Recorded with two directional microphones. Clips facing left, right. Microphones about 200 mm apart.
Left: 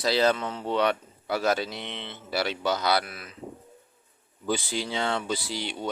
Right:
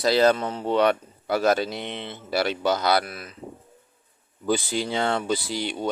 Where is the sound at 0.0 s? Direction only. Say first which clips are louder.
Right 4 dB; 50° right (ahead or behind).